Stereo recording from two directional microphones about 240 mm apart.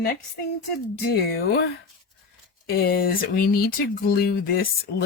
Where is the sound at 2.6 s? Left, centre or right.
Left.